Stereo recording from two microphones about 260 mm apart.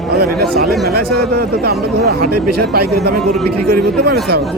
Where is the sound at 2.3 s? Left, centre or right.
Right.